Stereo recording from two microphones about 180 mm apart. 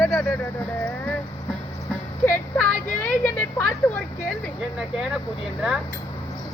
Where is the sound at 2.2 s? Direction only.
10° left (ahead or behind).